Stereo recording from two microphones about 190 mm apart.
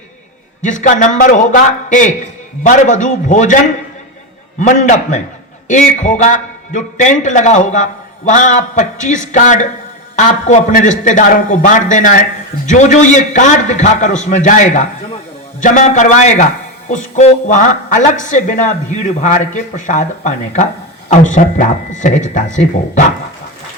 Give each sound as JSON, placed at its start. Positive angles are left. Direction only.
{"t": 0.6, "sound": "a man's voice", "side_deg": 40}
{"t": 4.6, "sound": "a man's voice", "side_deg": 40}